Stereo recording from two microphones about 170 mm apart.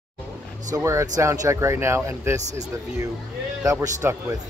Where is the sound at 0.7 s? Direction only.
20° right (ahead or behind).